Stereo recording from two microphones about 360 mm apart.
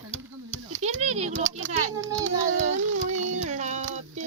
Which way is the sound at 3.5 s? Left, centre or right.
Centre.